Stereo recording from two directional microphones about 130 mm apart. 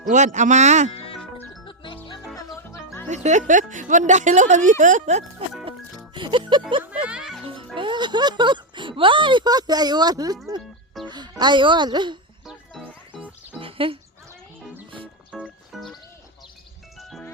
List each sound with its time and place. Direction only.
0.1 s speech: 70° right (ahead or behind)
1.6 s music: 40° left (ahead or behind)
2.3 s music: 20° left (ahead or behind)
3.1 s speech: 65° right (ahead or behind)
6.1 s speech: 40° right (ahead or behind)
7.0 s music: 5° right (ahead or behind)
7.4 s speech: 40° right (ahead or behind)
12.5 s music: 5° right (ahead or behind)
13.6 s a sound: 45° right (ahead or behind)
15.3 s music: 5° right (ahead or behind)
17.0 s music: centre (ahead or behind)